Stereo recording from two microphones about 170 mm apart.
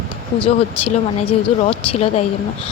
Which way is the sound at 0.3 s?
35° left (ahead or behind).